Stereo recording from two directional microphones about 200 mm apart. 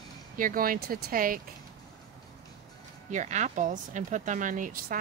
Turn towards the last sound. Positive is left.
turn(degrees=-45)  # may be behind; listen again after turning